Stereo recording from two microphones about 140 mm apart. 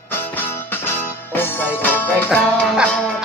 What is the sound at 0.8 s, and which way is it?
Music, 15° left (ahead or behind).